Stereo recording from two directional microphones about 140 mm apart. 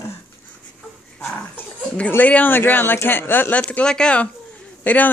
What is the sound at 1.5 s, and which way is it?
Speech, 15° left (ahead or behind).